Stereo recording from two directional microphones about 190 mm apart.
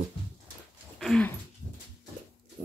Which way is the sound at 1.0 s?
5° left (ahead or behind).